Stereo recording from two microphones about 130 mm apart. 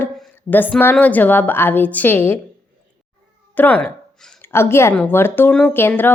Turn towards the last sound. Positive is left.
turn(degrees=15)  # may be behind; listen again after turning